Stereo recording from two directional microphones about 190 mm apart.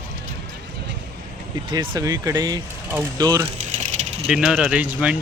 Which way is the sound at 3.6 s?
35° right (ahead or behind).